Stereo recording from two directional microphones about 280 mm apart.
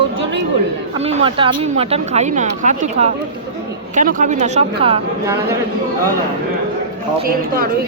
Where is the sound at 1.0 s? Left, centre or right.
Centre.